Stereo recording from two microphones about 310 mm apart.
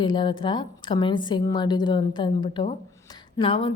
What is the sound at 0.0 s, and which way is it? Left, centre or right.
A woman's voice, centre.